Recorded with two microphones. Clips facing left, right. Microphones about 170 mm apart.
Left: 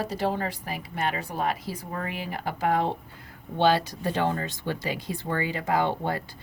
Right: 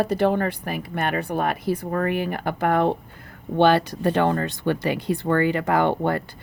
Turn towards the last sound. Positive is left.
turn(degrees=-60)  # may be behind; listen again after turning